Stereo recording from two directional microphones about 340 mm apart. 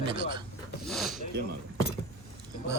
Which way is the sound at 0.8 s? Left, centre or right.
Centre.